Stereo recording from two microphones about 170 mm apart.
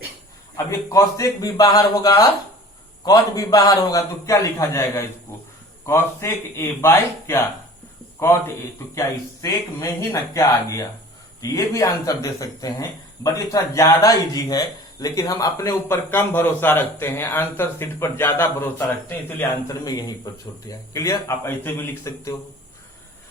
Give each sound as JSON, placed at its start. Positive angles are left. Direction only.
{"t": 0.5, "sound": "a man's voice", "side_deg": 20}
{"t": 9.0, "sound": "a man's voice", "side_deg": 15}